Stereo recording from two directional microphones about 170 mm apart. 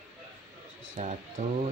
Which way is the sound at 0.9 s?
45° right (ahead or behind).